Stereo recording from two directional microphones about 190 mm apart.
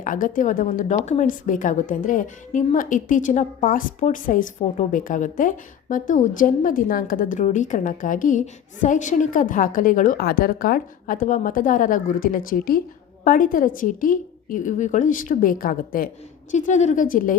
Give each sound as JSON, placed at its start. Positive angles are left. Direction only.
{"t": 0.0, "sound": "a woman's voice", "side_deg": 45}